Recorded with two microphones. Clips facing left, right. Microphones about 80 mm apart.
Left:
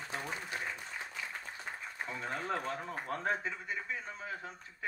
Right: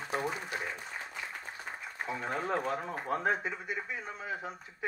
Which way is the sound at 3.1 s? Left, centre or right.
Centre.